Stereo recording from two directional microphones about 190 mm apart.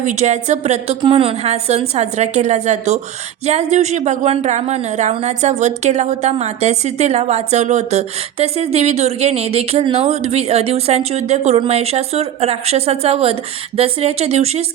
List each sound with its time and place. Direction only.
0.0 s a woman's voice: 40° right (ahead or behind)